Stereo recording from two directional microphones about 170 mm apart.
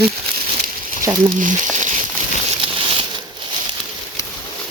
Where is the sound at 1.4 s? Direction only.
45° right (ahead or behind).